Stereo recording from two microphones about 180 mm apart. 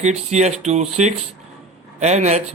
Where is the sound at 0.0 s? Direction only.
40° right (ahead or behind).